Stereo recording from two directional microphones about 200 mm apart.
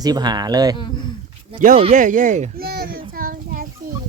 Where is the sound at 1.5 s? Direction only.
40° right (ahead or behind).